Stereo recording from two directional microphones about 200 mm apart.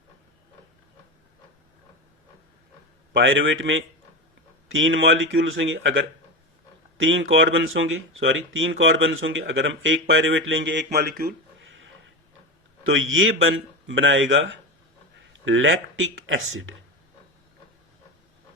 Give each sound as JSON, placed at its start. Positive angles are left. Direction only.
{"t": 3.1, "sound": "speech", "side_deg": -65}
{"t": 10.8, "sound": "speech", "side_deg": -50}
{"t": 11.7, "sound": "pig", "side_deg": -70}
{"t": 12.8, "sound": "speech", "side_deg": -80}